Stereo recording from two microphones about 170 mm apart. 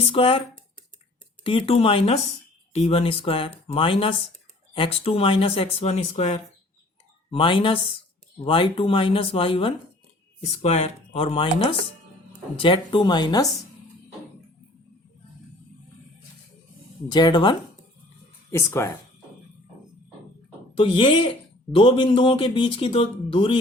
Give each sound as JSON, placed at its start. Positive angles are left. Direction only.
{"t": 0.1, "sound": "speech", "side_deg": 30}
{"t": 1.5, "sound": "speech", "side_deg": 35}
{"t": 17.1, "sound": "speech", "side_deg": 25}
{"t": 20.7, "sound": "speech", "side_deg": 30}